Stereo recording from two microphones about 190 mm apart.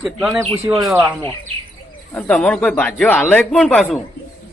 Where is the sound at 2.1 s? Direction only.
5° left (ahead or behind).